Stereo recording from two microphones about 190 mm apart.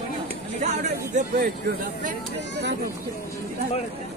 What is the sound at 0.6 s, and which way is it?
Speech, 40° right (ahead or behind).